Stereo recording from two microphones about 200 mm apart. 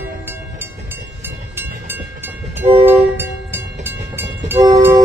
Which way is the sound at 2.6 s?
30° right (ahead or behind).